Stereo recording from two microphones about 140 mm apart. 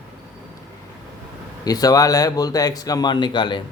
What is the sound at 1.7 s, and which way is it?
A man's voice, 25° left (ahead or behind).